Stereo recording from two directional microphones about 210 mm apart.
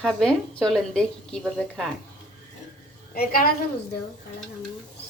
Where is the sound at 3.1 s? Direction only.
45° left (ahead or behind).